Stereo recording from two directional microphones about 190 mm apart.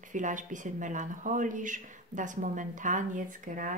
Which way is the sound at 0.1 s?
40° right (ahead or behind).